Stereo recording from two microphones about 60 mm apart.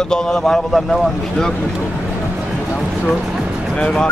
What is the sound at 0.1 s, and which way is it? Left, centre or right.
Speech, centre.